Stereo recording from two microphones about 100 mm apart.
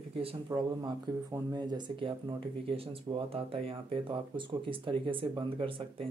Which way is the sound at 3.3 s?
70° right (ahead or behind).